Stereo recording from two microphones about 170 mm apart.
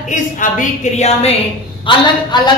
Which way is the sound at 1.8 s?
25° left (ahead or behind).